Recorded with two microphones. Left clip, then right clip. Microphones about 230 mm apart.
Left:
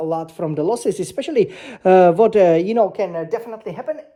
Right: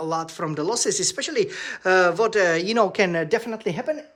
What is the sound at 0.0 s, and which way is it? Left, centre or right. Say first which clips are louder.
Speech: left 4 dB; centre.